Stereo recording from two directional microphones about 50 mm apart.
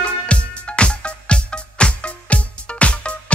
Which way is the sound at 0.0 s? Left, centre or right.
Left.